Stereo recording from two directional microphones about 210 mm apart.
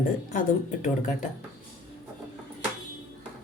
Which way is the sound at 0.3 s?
35° left (ahead or behind).